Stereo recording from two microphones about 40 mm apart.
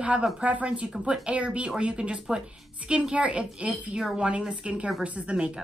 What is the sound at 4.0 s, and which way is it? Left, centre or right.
Speech, centre.